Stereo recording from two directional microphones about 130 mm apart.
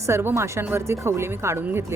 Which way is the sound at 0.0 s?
20° right (ahead or behind).